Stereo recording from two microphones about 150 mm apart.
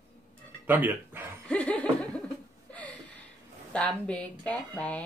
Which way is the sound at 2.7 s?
10° left (ahead or behind).